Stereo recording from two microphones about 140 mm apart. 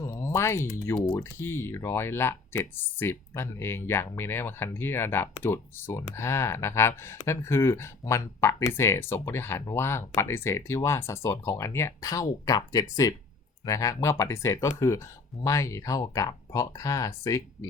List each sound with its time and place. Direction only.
0.0 s a sound: 20° left (ahead or behind)
0.9 s speech: 5° left (ahead or behind)
1.2 s speech: 20° left (ahead or behind)